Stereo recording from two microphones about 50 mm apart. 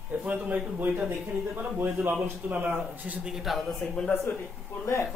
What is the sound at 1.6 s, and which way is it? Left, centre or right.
Speech, right.